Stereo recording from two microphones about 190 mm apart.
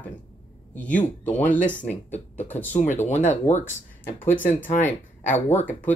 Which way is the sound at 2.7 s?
40° left (ahead or behind).